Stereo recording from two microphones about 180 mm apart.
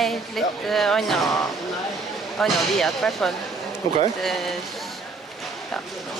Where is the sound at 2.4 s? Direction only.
Centre (ahead or behind).